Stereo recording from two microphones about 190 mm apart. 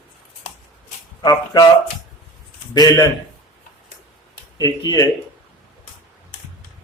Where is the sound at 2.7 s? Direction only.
20° left (ahead or behind).